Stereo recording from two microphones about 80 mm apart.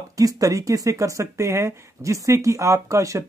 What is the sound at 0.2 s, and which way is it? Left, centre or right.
Speech, right.